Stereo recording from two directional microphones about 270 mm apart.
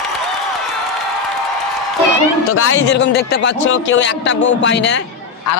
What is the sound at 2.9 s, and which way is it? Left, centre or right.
A man's voice, left.